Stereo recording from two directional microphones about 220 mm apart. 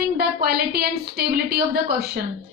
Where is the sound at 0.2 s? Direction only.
45° right (ahead or behind).